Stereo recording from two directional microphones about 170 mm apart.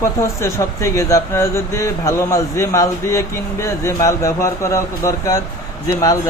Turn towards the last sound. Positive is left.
turn(degrees=20)  # may be behind; listen again after turning